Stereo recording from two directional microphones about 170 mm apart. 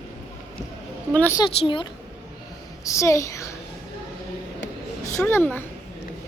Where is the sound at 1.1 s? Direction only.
10° left (ahead or behind).